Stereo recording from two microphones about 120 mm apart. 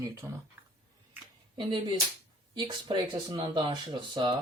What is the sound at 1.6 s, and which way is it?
Speech, 40° right (ahead or behind).